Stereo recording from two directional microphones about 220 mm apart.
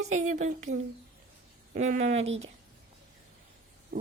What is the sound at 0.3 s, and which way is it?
Speech, 35° right (ahead or behind).